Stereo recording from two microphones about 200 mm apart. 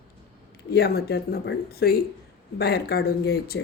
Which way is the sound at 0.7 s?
50° left (ahead or behind).